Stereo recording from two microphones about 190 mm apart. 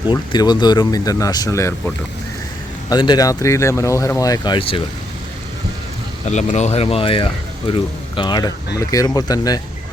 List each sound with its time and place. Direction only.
0.1 s speech: 20° left (ahead or behind)
2.9 s speech: 20° left (ahead or behind)
6.2 s speech: 40° left (ahead or behind); by 9.6 s 20° left (ahead or behind)